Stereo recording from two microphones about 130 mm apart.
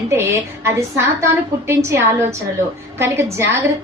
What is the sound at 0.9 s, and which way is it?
A woman's voice, 20° right (ahead or behind).